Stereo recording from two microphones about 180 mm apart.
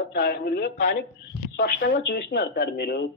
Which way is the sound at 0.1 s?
65° left (ahead or behind).